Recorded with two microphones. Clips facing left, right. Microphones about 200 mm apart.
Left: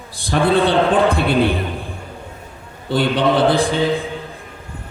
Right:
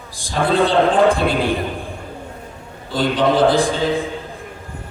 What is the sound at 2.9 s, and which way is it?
Speech, 65° left (ahead or behind).